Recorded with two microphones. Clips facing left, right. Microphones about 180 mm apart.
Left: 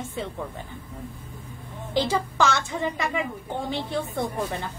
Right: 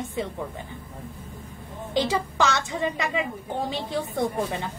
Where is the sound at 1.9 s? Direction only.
15° right (ahead or behind).